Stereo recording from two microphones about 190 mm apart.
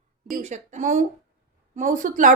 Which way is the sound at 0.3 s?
40° right (ahead or behind).